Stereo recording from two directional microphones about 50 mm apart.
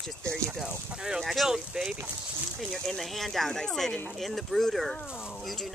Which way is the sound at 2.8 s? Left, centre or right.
Centre.